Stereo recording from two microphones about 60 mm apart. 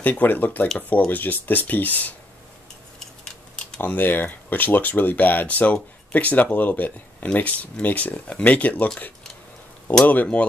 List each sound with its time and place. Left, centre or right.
0.0 s speech: left
3.8 s speech: left
9.9 s speech: left